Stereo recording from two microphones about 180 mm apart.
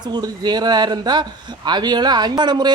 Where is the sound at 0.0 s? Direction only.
25° right (ahead or behind).